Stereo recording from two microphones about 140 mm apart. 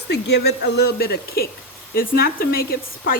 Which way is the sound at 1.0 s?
90° left.